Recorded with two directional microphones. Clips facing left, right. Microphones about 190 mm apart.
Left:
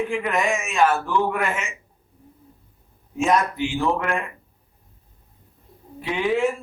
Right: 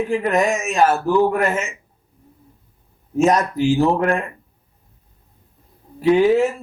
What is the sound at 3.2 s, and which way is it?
Speech, 40° right (ahead or behind).